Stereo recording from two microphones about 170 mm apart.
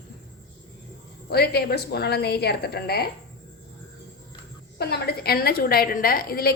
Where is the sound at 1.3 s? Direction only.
70° left (ahead or behind).